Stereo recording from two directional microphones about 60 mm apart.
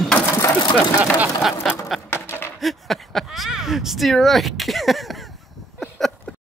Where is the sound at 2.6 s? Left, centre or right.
Centre.